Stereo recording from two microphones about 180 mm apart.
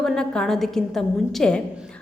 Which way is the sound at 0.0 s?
5° left (ahead or behind).